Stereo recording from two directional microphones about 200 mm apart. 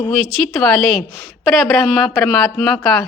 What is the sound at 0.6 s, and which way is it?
A woman's voice, 5° left (ahead or behind).